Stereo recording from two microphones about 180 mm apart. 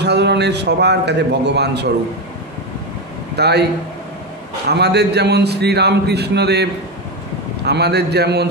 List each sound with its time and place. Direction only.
0.0 s a man's voice: 70° right (ahead or behind)
3.3 s a man's voice: 65° right (ahead or behind)
4.6 s a man's voice: 65° right (ahead or behind)